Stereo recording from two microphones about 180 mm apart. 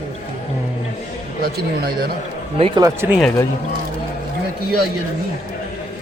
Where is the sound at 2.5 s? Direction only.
30° right (ahead or behind).